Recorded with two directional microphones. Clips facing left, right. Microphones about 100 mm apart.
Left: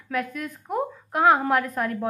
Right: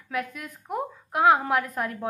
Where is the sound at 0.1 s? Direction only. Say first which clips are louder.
Left 3 dB; 15° right (ahead or behind).